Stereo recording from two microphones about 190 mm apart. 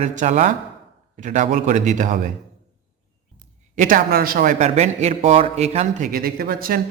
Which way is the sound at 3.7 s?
45° right (ahead or behind).